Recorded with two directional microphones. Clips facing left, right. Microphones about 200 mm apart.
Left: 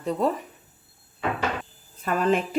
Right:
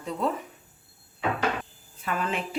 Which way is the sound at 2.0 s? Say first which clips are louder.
Left 7 dB; 40° left (ahead or behind).